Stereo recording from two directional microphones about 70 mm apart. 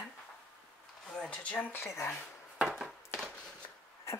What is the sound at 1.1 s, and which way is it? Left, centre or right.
Speech, centre.